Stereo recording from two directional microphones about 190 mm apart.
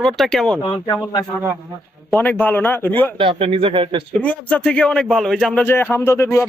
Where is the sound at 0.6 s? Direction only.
20° left (ahead or behind).